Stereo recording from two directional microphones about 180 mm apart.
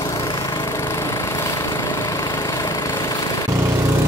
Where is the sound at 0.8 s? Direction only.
15° left (ahead or behind).